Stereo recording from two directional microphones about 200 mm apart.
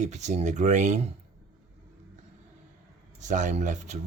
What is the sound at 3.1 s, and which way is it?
Speech, 40° right (ahead or behind).